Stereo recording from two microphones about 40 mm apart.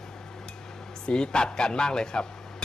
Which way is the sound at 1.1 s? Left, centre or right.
Left.